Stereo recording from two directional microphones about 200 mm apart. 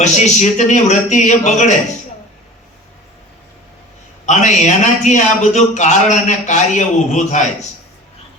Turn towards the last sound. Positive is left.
turn(degrees=35)  # may be behind; listen again after turning